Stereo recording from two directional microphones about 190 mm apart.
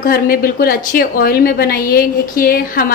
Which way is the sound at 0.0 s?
50° left (ahead or behind).